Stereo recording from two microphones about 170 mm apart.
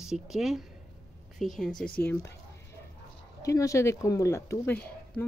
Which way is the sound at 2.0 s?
15° left (ahead or behind).